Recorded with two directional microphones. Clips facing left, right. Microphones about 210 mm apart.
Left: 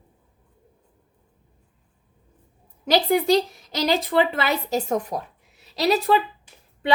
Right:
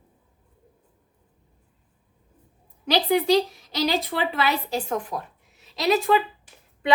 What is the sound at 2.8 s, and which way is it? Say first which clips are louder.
A woman's voice: left 1 dB; 45° left (ahead or behind).